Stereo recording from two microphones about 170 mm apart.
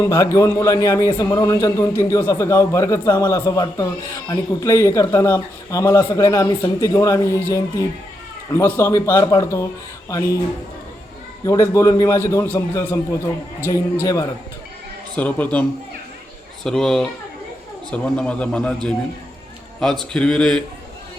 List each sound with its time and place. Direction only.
0.0 s a man's voice: 20° left (ahead or behind)
11.4 s a man's voice: 20° left (ahead or behind)
14.0 s a man's voice: 20° left (ahead or behind)
15.1 s a man's voice: 10° left (ahead or behind)
16.6 s a man's voice: 5° left (ahead or behind)